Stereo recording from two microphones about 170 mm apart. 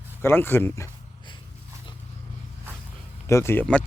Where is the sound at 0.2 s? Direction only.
15° left (ahead or behind).